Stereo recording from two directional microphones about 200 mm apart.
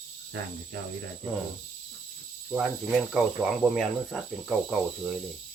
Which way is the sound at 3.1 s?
5° right (ahead or behind).